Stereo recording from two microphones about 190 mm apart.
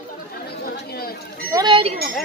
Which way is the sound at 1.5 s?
25° right (ahead or behind).